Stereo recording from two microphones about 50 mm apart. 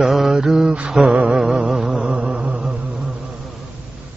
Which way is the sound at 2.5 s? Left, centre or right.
Centre.